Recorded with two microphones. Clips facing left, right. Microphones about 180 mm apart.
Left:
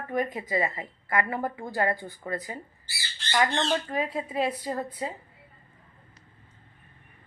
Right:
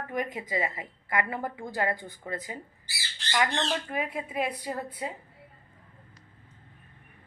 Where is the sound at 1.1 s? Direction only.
15° right (ahead or behind).